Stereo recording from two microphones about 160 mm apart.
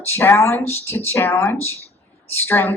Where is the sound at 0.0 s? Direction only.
15° left (ahead or behind).